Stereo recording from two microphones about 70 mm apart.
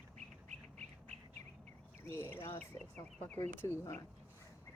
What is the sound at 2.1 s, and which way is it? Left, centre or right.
Speech, left.